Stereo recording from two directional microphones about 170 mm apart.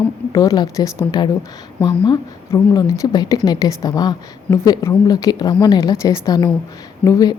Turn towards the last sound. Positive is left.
turn(degrees=20)  # may be behind; listen again after turning